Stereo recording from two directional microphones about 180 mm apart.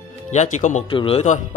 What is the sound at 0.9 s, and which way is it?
Speech, 30° left (ahead or behind).